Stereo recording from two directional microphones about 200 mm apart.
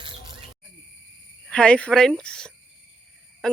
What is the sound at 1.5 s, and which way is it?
Speech, 5° left (ahead or behind).